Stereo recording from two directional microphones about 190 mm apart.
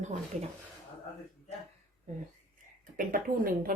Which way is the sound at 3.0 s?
50° right (ahead or behind).